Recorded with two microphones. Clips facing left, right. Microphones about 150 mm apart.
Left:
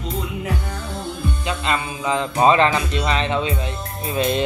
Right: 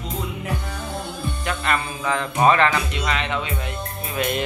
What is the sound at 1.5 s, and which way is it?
Speech, 20° left (ahead or behind).